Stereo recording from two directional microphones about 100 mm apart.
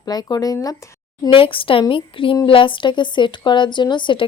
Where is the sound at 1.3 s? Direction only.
60° left (ahead or behind).